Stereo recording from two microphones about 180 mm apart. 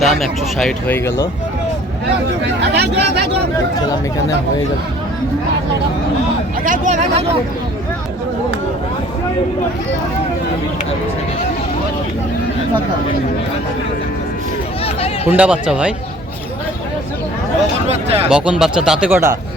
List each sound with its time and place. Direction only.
0.0 s speech: centre (ahead or behind)
2.6 s speech: 70° right (ahead or behind)
6.7 s speech: 45° right (ahead or behind)
14.8 s hubbub: 35° left (ahead or behind)
15.3 s speech: 5° right (ahead or behind)
17.8 s speech: 35° right (ahead or behind)
18.3 s speech: 5° right (ahead or behind)